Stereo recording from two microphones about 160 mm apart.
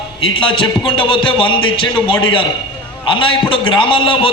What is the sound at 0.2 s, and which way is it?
A man's voice, 35° left (ahead or behind).